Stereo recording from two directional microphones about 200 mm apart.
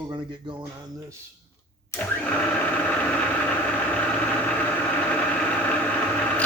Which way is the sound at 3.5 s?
10° left (ahead or behind).